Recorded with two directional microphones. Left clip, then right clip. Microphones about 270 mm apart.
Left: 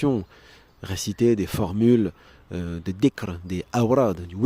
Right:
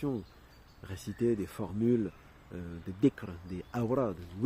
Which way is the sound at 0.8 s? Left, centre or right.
Left.